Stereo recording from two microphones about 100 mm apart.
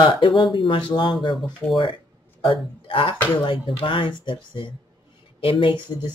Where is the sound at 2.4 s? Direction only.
55° left (ahead or behind).